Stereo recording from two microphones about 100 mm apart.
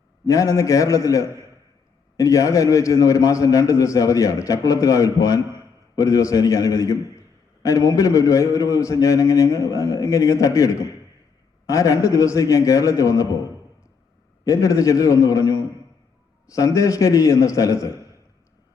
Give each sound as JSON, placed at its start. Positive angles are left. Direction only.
{"t": 0.3, "sound": "a man's voice", "side_deg": 30}
{"t": 14.4, "sound": "a man's voice", "side_deg": 30}